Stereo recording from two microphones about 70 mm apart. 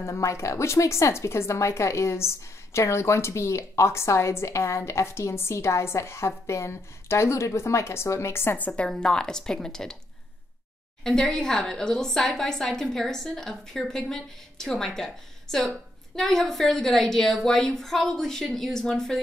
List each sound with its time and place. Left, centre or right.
0.0 s a woman's voice: left
8.5 s a woman's voice: centre
9.0 s a woman's voice: centre
11.1 s a woman's voice: centre